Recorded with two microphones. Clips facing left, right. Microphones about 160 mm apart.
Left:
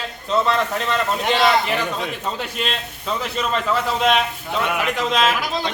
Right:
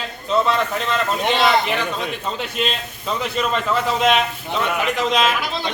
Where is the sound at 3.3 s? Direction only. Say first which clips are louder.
Right 1 dB; centre (ahead or behind).